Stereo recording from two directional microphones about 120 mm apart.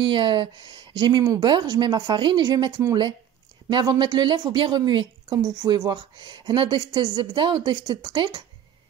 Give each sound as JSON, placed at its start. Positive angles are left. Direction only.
{"t": 0.0, "sound": "a woman's voice", "side_deg": -45}